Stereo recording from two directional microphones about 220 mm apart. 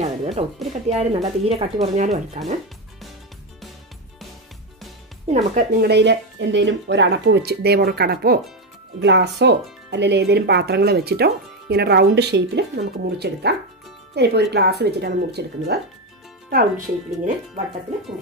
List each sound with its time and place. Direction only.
0.0 s speech: 25° right (ahead or behind)
5.3 s speech: 30° right (ahead or behind)
5.9 s speech: 50° right (ahead or behind)